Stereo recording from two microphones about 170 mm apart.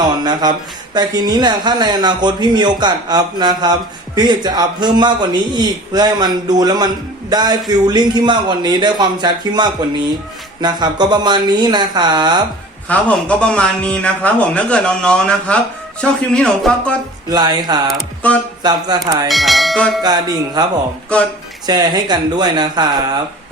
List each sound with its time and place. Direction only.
0.0 s a sound: 25° right (ahead or behind)
0.9 s speech: 25° right (ahead or behind)
12.9 s a man's voice: 5° left (ahead or behind)
17.2 s speech: 25° right (ahead or behind)
17.9 s speech: 5° left (ahead or behind)
18.6 s speech: 25° right (ahead or behind)
19.3 s speech: centre (ahead or behind)
20.0 s speech: 25° right (ahead or behind)
21.7 s speech: 25° right (ahead or behind)